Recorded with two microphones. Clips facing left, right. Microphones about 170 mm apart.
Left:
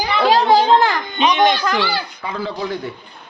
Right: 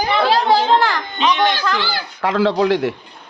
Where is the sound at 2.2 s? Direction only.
90° right.